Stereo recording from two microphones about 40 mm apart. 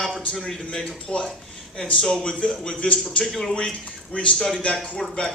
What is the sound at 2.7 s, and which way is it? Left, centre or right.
Speech, left.